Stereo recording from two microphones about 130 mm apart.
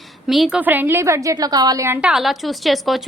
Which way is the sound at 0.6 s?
15° right (ahead or behind).